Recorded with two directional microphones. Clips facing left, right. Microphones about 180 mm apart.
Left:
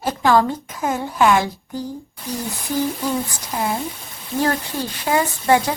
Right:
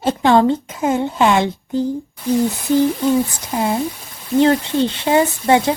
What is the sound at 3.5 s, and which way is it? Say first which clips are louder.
A woman's voice: right 4 dB; 25° right (ahead or behind).